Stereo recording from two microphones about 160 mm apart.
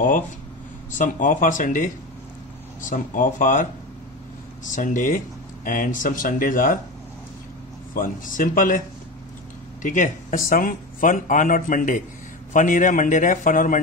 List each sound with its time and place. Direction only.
0.9 s speech: 55° left (ahead or behind)
4.6 s speech: 55° left (ahead or behind)
7.9 s speech: 60° left (ahead or behind)